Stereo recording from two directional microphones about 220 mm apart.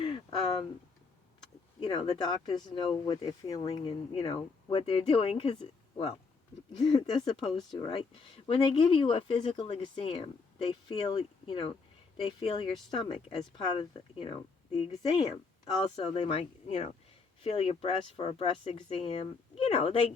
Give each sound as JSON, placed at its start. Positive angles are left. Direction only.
{"t": 0.0, "sound": "a sound", "side_deg": 20}
{"t": 1.8, "sound": "speech", "side_deg": 20}
{"t": 15.8, "sound": "speech", "side_deg": 25}